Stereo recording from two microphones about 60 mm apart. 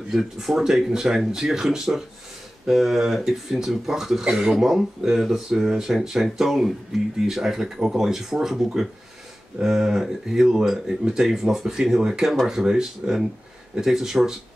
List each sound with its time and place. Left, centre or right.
0.1 s speech: centre